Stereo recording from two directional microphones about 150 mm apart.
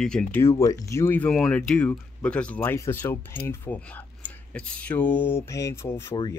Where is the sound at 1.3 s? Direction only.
5° left (ahead or behind).